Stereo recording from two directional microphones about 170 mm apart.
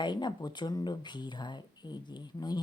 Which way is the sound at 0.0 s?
25° left (ahead or behind).